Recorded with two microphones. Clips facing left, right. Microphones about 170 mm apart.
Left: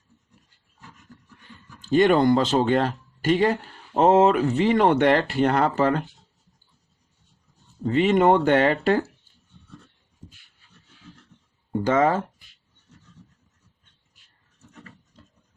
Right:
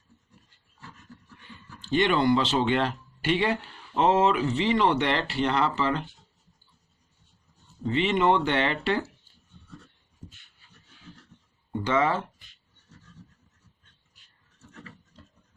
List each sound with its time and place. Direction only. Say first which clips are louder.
1.8 s speech: left 6 dB; 45° left (ahead or behind)
7.9 s speech: left 5 dB; 45° left (ahead or behind)
11.7 s speech: left 5 dB; 45° left (ahead or behind)